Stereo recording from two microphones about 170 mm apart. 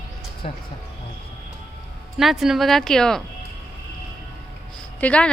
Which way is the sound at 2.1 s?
Centre (ahead or behind).